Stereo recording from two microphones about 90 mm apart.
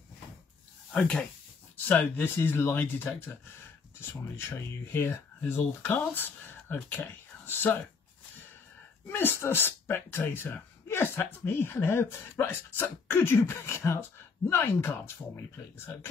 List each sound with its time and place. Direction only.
0.9 s speech: 10° left (ahead or behind)
1.9 s speech: 20° left (ahead or behind)
9.0 s speech: 25° left (ahead or behind)